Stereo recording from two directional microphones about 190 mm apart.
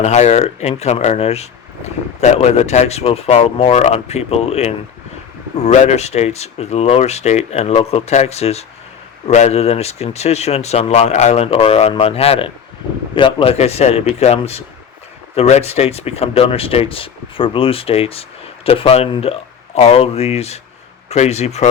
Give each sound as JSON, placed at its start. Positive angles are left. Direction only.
{"t": 0.0, "sound": "speech", "side_deg": 35}